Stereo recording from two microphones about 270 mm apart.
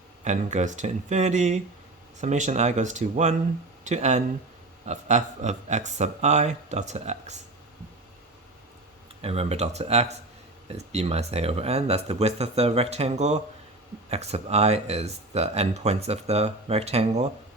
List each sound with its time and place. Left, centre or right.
0.3 s speech: right
9.2 s speech: right